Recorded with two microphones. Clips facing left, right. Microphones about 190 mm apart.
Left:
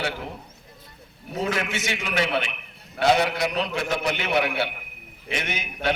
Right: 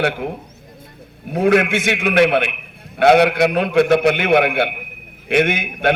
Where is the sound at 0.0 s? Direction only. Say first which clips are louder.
Right 10 dB; 60° right (ahead or behind).